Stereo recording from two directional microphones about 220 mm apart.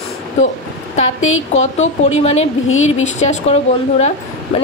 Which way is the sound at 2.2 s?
30° left (ahead or behind).